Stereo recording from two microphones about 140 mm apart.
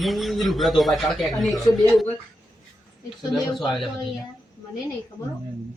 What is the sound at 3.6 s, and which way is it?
Speech, centre (ahead or behind).